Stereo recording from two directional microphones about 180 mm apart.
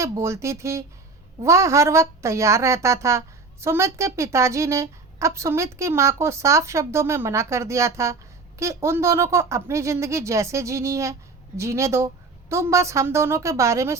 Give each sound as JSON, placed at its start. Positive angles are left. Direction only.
{"t": 0.0, "sound": "a woman's voice", "side_deg": -15}